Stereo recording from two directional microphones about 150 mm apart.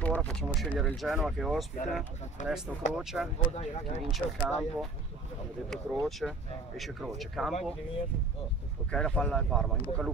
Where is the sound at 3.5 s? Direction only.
45° left (ahead or behind).